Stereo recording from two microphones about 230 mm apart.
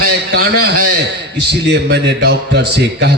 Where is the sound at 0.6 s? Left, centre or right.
Right.